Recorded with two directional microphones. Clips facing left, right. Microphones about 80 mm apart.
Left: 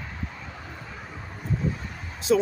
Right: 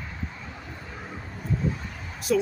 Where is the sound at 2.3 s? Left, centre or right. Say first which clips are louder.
Left 2 dB; left.